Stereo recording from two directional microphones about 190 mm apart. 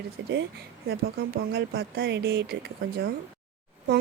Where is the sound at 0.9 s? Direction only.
55° right (ahead or behind).